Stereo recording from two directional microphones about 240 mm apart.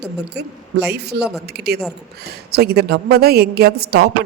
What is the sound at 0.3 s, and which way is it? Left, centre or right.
A woman's voice, right.